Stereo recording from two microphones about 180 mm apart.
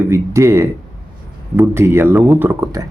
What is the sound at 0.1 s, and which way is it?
Speech, 15° right (ahead or behind).